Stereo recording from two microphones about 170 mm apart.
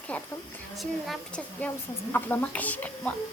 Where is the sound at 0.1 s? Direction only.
10° left (ahead or behind).